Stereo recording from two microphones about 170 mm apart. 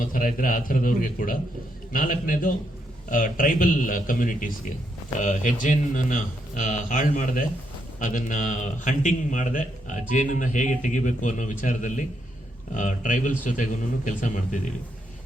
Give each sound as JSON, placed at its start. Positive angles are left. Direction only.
{"t": 0.0, "sound": "a man's voice", "side_deg": 50}